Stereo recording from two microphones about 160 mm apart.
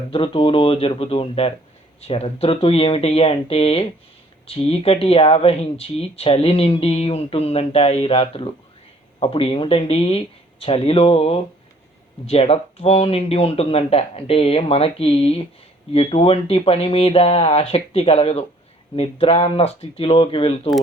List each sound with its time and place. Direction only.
0.1 s speech: 35° left (ahead or behind)